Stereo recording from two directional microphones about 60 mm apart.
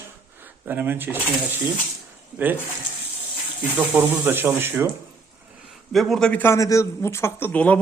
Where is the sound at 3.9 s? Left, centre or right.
Right.